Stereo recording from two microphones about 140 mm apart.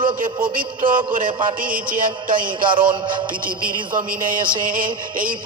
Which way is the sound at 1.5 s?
90° right.